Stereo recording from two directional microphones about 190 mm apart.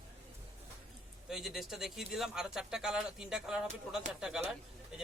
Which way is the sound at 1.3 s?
Centre (ahead or behind).